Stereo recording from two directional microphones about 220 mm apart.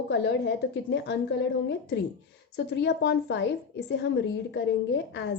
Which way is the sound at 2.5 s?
50° left (ahead or behind).